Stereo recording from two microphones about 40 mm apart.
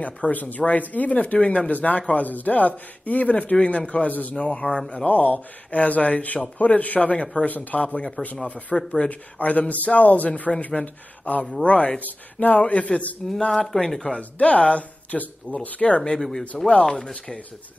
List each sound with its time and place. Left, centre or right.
0.0 s speech: left
3.5 s speech: left
4.4 s speech: left
5.0 s speech: left
8.7 s speech: centre
9.4 s speech: left
12.0 s speech: left
12.5 s speech: left
13.7 s speech: centre
14.4 s speech: left
16.0 s speech: centre
16.6 s speech: left